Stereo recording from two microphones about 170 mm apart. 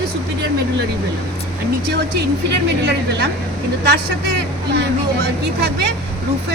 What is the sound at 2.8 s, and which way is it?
Speech, 75° right (ahead or behind).